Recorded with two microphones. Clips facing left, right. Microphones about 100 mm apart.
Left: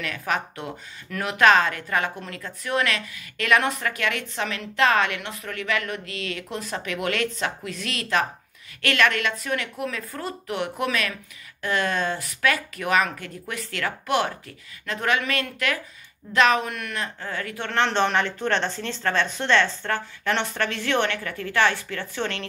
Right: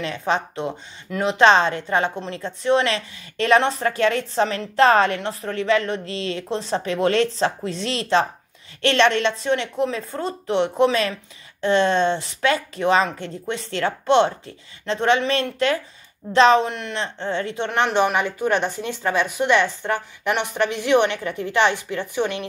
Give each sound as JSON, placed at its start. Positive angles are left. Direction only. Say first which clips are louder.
{"t": 0.0, "sound": "speech", "louder": "right 4 dB", "side_deg": -25}